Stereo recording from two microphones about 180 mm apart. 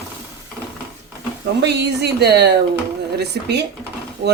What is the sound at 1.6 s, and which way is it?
Speech, 65° right (ahead or behind).